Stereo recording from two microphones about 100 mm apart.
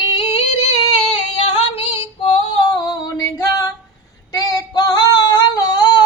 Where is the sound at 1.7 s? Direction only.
80° left.